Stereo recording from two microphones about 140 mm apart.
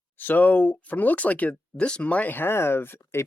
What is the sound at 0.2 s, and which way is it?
Speech, 15° left (ahead or behind).